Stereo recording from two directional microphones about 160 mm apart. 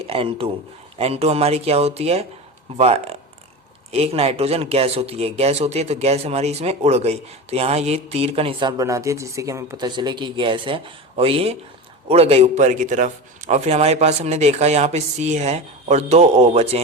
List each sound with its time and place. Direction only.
0.0 s speech: 35° right (ahead or behind)